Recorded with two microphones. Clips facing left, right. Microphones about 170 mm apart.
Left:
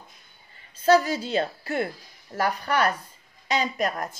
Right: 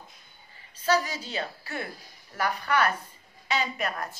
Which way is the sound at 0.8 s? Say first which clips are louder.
Left 7 dB; 45° left (ahead or behind).